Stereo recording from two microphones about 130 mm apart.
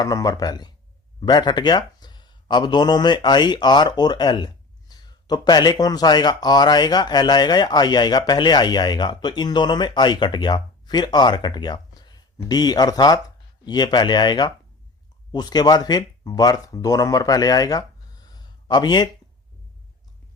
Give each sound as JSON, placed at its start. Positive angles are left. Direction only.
{"t": 0.0, "sound": "speech", "side_deg": 30}